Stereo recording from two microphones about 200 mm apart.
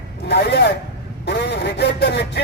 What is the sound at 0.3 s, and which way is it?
Speech, 55° left (ahead or behind).